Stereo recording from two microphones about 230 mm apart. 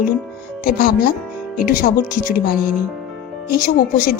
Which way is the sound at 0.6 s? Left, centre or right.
Left.